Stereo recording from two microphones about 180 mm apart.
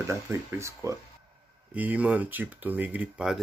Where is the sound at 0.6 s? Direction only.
15° right (ahead or behind).